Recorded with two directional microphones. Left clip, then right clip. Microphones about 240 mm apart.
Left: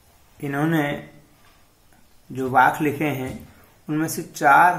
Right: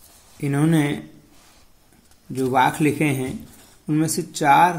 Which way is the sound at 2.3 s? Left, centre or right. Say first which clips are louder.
Left 1 dB; right.